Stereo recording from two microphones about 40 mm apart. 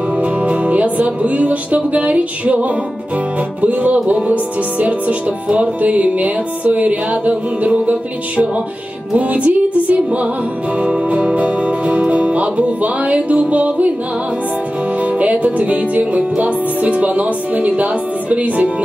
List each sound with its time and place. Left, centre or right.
0.1 s music: right
10.8 s music: right
15.0 s music: right